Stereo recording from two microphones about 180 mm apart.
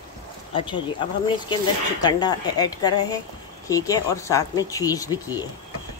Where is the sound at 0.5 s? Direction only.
25° left (ahead or behind).